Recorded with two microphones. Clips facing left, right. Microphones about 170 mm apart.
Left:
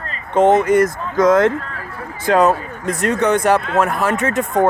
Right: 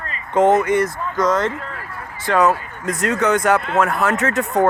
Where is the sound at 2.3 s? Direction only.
25° left (ahead or behind).